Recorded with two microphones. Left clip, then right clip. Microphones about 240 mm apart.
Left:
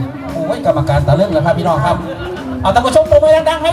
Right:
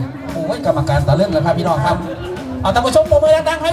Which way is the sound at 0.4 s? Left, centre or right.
Centre.